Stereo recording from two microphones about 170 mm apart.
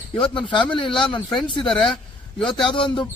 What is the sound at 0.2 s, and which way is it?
A man's voice, 30° left (ahead or behind).